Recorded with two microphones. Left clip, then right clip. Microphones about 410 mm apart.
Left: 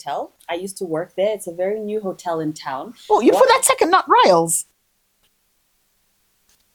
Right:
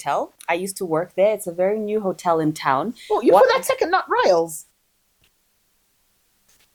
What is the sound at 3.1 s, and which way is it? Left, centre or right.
A woman's voice, left.